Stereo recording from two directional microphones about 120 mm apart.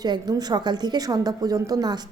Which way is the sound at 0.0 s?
35° right (ahead or behind).